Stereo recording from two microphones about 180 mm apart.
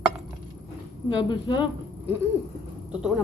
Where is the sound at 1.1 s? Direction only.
25° left (ahead or behind).